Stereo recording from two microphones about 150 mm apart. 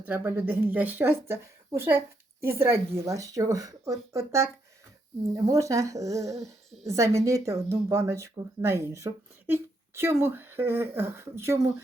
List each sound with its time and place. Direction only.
0.0 s speech: 10° right (ahead or behind)